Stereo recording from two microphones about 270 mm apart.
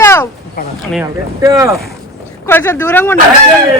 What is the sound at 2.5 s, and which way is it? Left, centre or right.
Speech, centre.